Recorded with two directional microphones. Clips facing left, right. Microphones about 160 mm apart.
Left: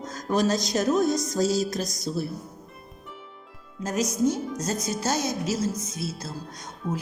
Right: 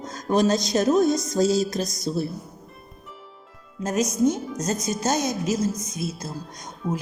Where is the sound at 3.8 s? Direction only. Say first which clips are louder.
Right 3 dB; 20° right (ahead or behind).